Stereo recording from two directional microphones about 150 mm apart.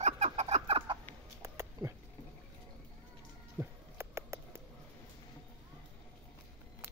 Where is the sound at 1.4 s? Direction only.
20° right (ahead or behind).